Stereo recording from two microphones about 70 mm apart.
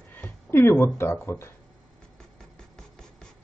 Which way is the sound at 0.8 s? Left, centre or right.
Left.